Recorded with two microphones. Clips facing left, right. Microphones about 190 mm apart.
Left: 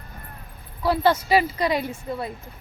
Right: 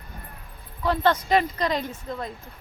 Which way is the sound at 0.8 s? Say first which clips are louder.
Left 2 dB; 10° left (ahead or behind).